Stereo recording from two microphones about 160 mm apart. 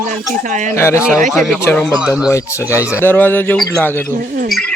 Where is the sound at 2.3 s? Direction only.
20° left (ahead or behind).